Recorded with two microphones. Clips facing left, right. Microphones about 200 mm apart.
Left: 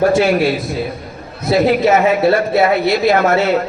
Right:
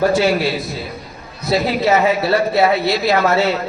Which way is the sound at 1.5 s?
50° left (ahead or behind).